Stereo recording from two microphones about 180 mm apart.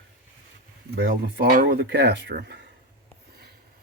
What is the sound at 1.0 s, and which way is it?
Speech, 75° right (ahead or behind).